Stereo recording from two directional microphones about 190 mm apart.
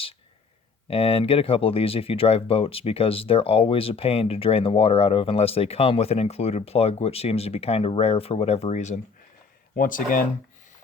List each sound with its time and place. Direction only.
0.9 s speech: 30° left (ahead or behind)